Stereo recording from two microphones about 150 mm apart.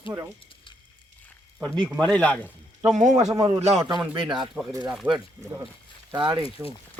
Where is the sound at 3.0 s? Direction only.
55° right (ahead or behind).